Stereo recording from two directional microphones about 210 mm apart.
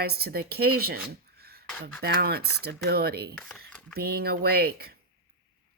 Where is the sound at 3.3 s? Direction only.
Centre (ahead or behind).